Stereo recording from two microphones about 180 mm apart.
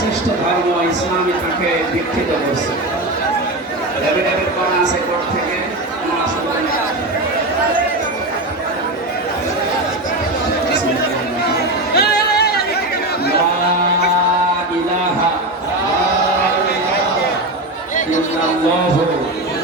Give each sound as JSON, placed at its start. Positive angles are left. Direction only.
{"t": 11.9, "sound": "music", "side_deg": 60}